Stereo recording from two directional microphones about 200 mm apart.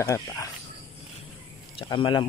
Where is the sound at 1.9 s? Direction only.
25° left (ahead or behind).